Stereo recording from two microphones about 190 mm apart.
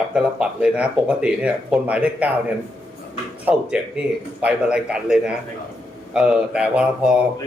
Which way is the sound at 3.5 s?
5° right (ahead or behind).